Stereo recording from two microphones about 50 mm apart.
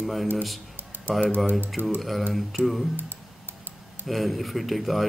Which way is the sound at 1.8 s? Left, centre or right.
Right.